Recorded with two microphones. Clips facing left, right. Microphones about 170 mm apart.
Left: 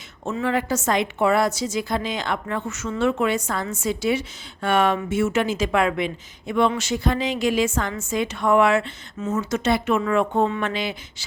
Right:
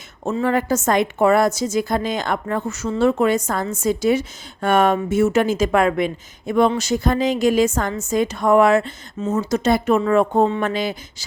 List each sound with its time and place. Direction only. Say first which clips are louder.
0.3 s a woman's voice: right 4 dB; 40° right (ahead or behind)